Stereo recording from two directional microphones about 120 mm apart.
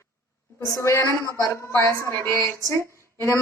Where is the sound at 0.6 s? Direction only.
25° left (ahead or behind).